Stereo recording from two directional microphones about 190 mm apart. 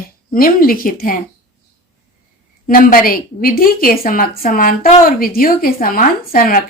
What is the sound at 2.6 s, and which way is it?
A woman's voice, 45° left (ahead or behind).